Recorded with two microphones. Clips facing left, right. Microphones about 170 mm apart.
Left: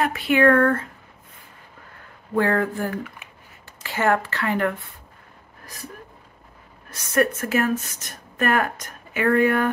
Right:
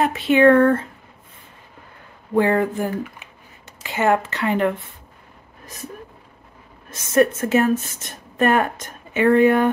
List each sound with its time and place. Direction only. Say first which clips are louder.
0.0 s a woman's voice: right 4 dB; 25° right (ahead or behind)
2.3 s a sound: right 3 dB; 15° right (ahead or behind)
3.8 s a woman's voice: right 2 dB; 20° right (ahead or behind)
6.9 s a woman's voice: right 4 dB; 25° right (ahead or behind)